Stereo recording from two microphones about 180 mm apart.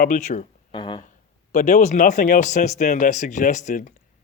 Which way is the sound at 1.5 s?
45° left (ahead or behind).